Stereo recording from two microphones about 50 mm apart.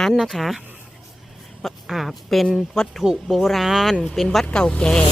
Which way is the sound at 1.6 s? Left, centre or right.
Centre.